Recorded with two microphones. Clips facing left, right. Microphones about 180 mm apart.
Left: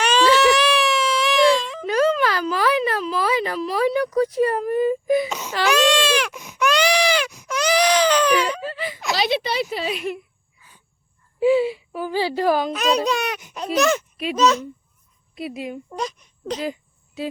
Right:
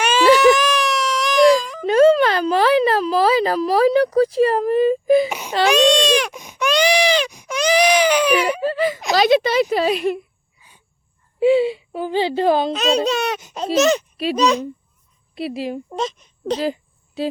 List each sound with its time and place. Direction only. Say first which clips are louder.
0.6 s wail: even; centre (ahead or behind)
1.9 s a sound: right 7 dB; 25° right (ahead or behind)
5.5 s baby cry: right 2 dB; 30° right (ahead or behind)
5.7 s a sound: right 3 dB; 15° right (ahead or behind)
8.6 s whimper: right 10 dB; 45° right (ahead or behind)
9.1 s a sound: right 8 dB; 45° right (ahead or behind)
11.3 s baby cry: right 2 dB; 25° right (ahead or behind)
14.3 s speech: even; 15° right (ahead or behind)
15.5 s a woman's voice: right 4 dB; 30° right (ahead or behind)